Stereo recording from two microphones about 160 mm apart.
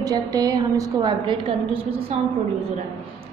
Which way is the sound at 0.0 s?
25° right (ahead or behind).